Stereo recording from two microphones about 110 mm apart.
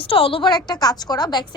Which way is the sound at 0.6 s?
35° left (ahead or behind).